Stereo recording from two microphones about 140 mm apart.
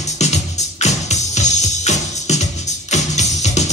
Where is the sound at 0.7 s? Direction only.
55° left (ahead or behind).